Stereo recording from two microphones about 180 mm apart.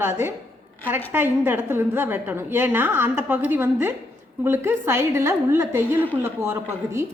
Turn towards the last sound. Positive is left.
turn(degrees=-15)  # may be behind; listen again after turning